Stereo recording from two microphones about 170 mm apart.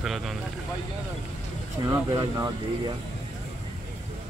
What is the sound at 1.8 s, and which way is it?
Speech, 20° right (ahead or behind).